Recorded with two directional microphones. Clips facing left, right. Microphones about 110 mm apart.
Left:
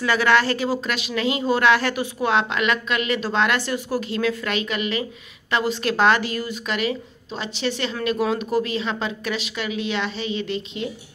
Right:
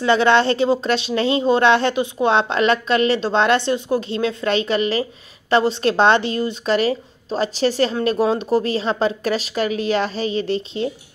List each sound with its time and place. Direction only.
0.0 s speech: 25° right (ahead or behind)